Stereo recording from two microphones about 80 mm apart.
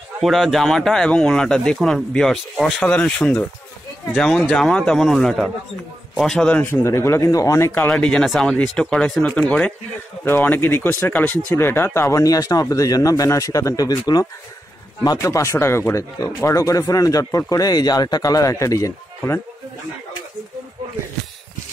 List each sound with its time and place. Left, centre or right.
0.2 s speech: centre
2.8 s speech: left
6.6 s speech: left
6.9 s speech: left
7.9 s speech: centre; by 14.2 s left
15.1 s speech: left